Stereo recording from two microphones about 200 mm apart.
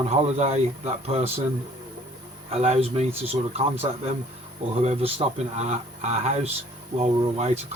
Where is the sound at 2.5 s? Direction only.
30° right (ahead or behind).